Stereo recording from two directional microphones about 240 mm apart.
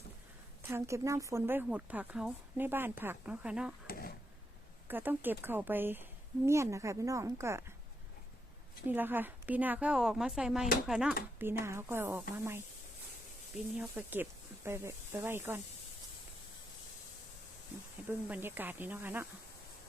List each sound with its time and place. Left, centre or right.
0.7 s speech: centre
3.8 s a sound: left
4.9 s speech: centre
8.9 s speech: centre
13.7 s speech: centre
18.3 s speech: centre